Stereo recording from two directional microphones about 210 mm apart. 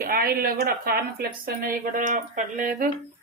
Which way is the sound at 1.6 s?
40° right (ahead or behind).